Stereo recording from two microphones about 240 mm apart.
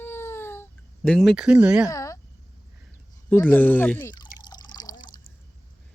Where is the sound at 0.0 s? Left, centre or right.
Centre.